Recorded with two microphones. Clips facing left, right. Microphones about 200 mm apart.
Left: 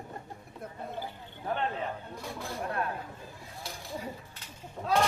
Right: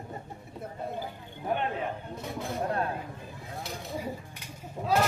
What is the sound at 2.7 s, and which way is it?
Speech, 30° right (ahead or behind).